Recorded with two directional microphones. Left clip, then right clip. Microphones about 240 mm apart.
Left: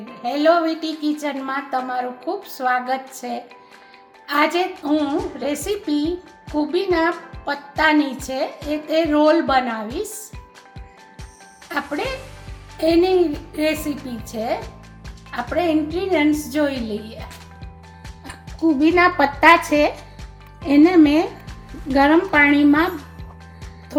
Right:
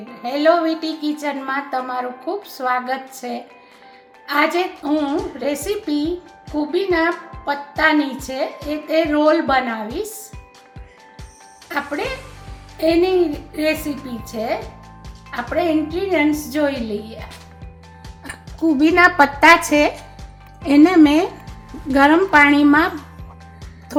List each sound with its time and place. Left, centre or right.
0.2 s a woman's voice: centre
11.7 s a woman's voice: centre
18.8 s a woman's voice: right